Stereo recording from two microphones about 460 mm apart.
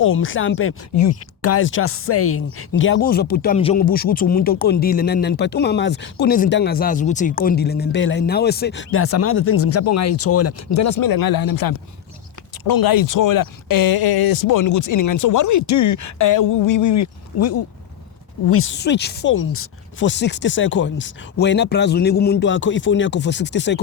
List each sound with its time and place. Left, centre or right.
0.0 s speech: left